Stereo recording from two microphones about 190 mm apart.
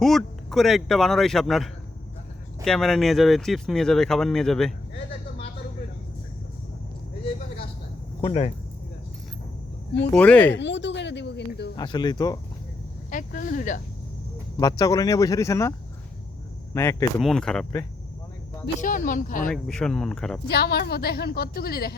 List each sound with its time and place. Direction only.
0.0 s speech: centre (ahead or behind)
8.2 s speech: 30° left (ahead or behind)
10.2 s speech: 5° left (ahead or behind)
10.5 s a sound: 70° left (ahead or behind)
11.8 s speech: 20° left (ahead or behind)
13.1 s speech: 45° left (ahead or behind)
14.6 s speech: 20° left (ahead or behind)
16.7 s speech: 15° left (ahead or behind)
17.2 s speech: centre (ahead or behind)
18.8 s speech: 45° left (ahead or behind)
19.6 s speech: 5° left (ahead or behind)
20.5 s a woman's voice: 60° left (ahead or behind)